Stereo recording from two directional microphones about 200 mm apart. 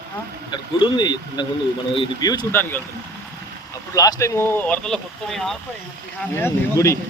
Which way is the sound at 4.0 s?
15° left (ahead or behind).